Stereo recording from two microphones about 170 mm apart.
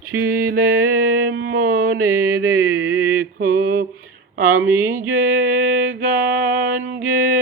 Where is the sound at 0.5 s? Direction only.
65° right (ahead or behind).